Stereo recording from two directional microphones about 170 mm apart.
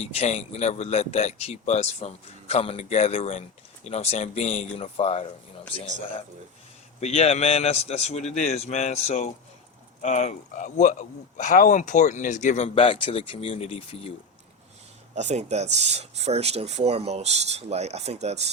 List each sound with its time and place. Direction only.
0.0 s speech: 40° left (ahead or behind)
7.0 s speech: 35° left (ahead or behind)
15.1 s speech: 40° right (ahead or behind)